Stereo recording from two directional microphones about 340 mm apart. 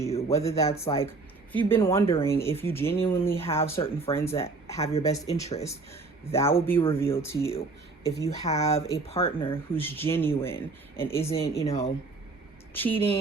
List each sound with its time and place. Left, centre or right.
0.0 s speech: centre
8.4 s speech: centre
12.7 s speech: centre